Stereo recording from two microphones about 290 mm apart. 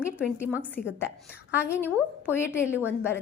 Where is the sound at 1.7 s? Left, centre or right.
Centre.